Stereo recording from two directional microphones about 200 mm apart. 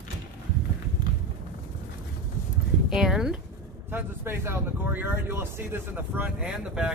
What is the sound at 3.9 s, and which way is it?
Speech, 10° right (ahead or behind).